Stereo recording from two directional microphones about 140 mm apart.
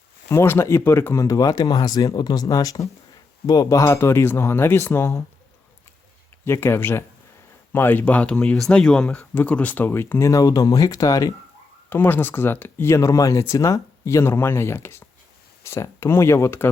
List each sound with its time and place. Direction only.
0.3 s speech: 15° left (ahead or behind)
6.4 s speech: 15° left (ahead or behind)
11.9 s speech: 15° left (ahead or behind)